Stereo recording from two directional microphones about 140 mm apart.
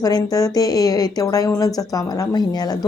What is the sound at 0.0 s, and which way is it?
Speech, 30° left (ahead or behind).